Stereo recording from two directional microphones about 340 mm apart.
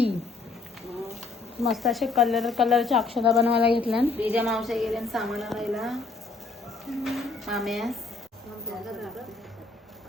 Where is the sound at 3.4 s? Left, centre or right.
Centre.